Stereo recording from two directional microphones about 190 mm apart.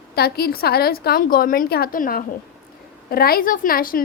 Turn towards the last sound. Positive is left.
turn(degrees=50)  # may be behind; listen again after turning